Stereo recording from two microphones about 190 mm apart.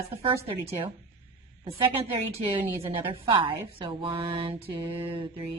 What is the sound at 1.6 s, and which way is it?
Mantra, 30° right (ahead or behind).